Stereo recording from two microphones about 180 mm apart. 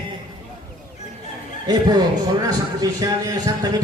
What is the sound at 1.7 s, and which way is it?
Speech, 20° right (ahead or behind).